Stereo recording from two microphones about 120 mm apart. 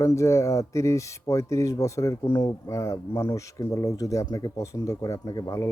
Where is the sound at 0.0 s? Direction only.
25° left (ahead or behind).